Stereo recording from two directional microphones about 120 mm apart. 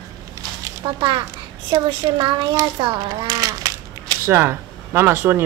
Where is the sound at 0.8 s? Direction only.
40° right (ahead or behind).